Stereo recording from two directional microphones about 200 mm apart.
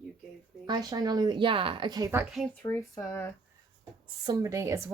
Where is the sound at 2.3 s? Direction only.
10° left (ahead or behind).